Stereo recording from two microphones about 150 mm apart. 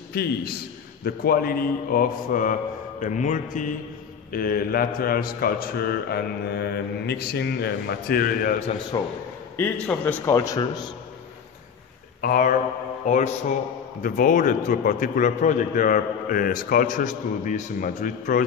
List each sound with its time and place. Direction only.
0.1 s a man's voice: 90° left; by 2.5 s 65° left (ahead or behind)
3.0 s a man's voice: 55° left (ahead or behind)
4.3 s a man's voice: 75° left (ahead or behind)
8.9 s a man's voice: 25° left (ahead or behind)
9.6 s a man's voice: 10° left (ahead or behind)
10.3 s a man's voice: 25° left (ahead or behind)
12.2 s speech: 70° left (ahead or behind)
13.0 s a man's voice: 55° left (ahead or behind)